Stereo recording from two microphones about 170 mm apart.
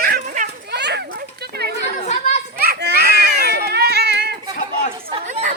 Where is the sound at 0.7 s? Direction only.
80° right.